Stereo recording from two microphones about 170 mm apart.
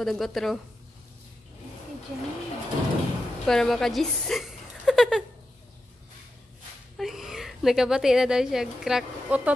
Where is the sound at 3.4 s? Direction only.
Centre (ahead or behind).